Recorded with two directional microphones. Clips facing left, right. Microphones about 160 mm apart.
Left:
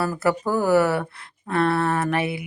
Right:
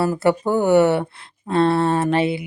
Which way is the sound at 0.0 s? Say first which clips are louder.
Right 4 dB; 25° right (ahead or behind).